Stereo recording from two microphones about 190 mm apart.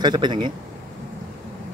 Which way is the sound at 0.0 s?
25° right (ahead or behind).